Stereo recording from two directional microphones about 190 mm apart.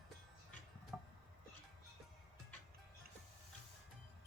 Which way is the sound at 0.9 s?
10° right (ahead or behind).